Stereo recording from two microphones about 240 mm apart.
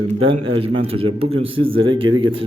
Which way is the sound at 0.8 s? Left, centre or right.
Right.